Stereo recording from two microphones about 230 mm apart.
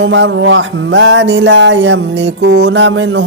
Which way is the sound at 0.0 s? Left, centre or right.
Right.